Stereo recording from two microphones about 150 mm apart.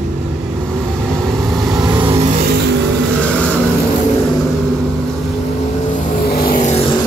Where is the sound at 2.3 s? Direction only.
70° right (ahead or behind).